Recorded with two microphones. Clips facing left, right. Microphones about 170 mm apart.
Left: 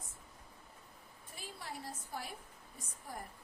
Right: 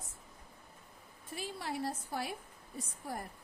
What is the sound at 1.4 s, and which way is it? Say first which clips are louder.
A woman's voice: right 8 dB; 85° right.